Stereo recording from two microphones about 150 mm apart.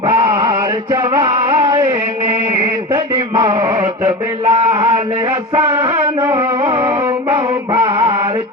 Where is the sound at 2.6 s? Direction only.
25° right (ahead or behind).